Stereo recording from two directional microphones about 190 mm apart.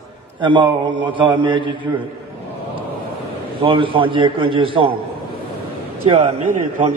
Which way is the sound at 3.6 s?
25° right (ahead or behind).